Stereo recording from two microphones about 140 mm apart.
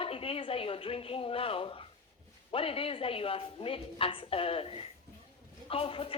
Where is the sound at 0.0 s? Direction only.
40° left (ahead or behind).